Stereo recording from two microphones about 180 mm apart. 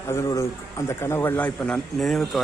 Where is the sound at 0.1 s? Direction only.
15° left (ahead or behind).